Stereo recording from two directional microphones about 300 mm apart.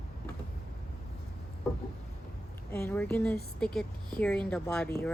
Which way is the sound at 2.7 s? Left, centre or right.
Centre.